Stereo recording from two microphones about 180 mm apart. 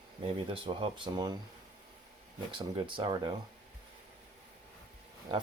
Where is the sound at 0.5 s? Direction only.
30° right (ahead or behind).